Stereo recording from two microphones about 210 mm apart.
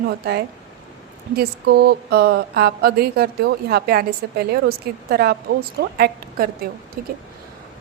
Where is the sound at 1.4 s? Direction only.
50° right (ahead or behind).